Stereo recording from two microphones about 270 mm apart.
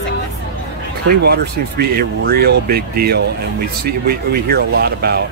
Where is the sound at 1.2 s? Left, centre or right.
Right.